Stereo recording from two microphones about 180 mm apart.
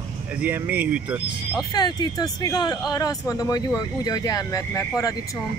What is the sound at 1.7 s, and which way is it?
Speech, 25° left (ahead or behind).